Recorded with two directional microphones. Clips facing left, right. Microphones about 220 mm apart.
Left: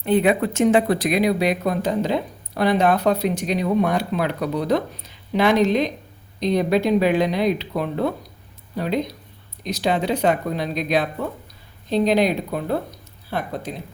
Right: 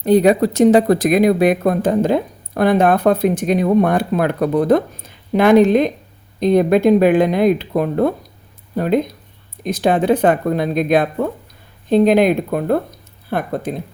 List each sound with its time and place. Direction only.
0.0 s speech: 40° right (ahead or behind)